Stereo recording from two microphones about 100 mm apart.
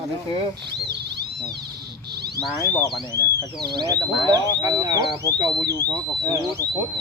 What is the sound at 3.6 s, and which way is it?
Speech, 45° right (ahead or behind).